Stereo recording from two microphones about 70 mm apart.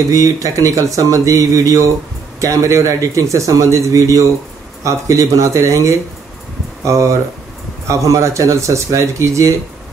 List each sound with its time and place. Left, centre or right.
0.1 s a man's voice: right